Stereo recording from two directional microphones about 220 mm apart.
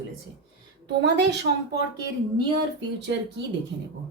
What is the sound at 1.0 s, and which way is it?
Speech, 50° right (ahead or behind).